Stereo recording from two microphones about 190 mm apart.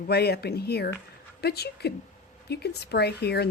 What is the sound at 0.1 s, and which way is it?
A woman's voice, 60° left (ahead or behind).